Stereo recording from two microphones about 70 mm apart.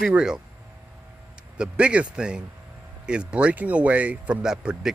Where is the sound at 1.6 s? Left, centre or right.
Centre.